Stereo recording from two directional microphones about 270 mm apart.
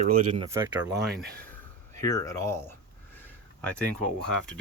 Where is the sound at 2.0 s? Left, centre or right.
Centre.